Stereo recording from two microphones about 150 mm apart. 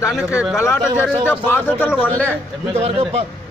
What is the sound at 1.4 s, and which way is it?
Speech, 15° left (ahead or behind).